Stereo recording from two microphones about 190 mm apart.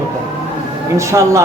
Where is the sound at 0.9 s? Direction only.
15° right (ahead or behind).